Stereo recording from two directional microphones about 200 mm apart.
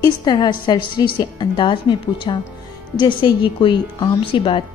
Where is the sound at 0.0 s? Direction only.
20° left (ahead or behind).